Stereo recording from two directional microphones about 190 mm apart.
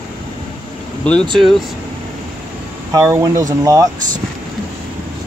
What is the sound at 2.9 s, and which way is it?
Speech, 15° right (ahead or behind).